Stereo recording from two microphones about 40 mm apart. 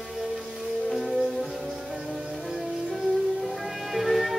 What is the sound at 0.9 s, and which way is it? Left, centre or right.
Music, centre.